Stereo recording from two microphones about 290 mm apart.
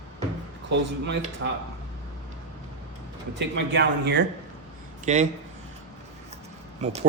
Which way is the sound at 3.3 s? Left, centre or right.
Right.